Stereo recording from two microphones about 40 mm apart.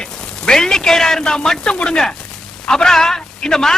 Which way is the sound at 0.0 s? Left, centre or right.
Centre.